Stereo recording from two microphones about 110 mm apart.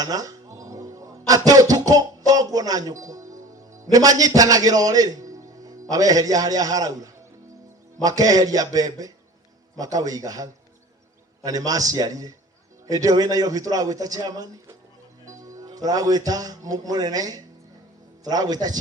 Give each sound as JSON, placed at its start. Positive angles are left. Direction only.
{"t": 0.0, "sound": "a man's voice", "side_deg": -35}